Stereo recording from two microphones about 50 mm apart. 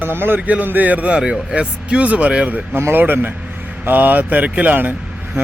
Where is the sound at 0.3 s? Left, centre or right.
Right.